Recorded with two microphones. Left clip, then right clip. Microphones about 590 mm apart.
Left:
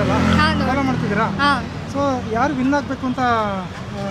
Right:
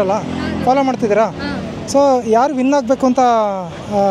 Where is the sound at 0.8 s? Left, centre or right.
Right.